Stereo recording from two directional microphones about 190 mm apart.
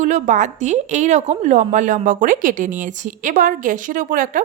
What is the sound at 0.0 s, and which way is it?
A woman's voice, 40° right (ahead or behind).